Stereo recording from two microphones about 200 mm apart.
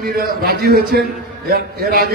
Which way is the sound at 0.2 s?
50° right (ahead or behind).